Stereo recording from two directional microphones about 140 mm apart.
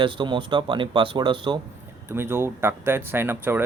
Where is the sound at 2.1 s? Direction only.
15° right (ahead or behind).